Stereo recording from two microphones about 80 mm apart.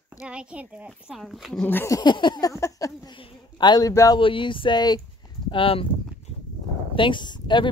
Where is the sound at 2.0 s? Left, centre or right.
Left.